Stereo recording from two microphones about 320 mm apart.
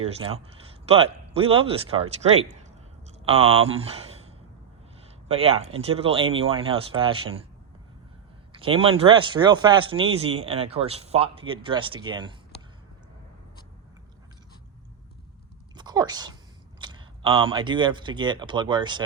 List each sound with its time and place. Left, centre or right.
0.0 s a man's voice: centre
5.3 s speech: centre
8.5 s speech: centre
15.7 s a sound: centre
16.8 s speech: centre